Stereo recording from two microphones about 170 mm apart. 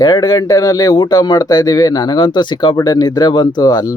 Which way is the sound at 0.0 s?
25° left (ahead or behind).